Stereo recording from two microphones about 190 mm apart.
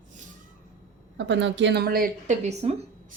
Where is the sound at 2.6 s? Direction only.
30° right (ahead or behind).